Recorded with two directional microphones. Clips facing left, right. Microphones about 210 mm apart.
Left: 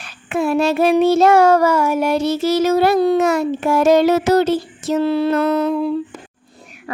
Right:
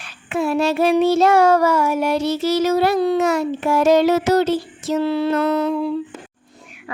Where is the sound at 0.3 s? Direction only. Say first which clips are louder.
Left 2 dB; 50° left (ahead or behind).